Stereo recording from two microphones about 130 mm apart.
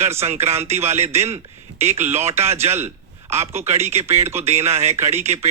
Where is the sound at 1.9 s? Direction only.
20° right (ahead or behind).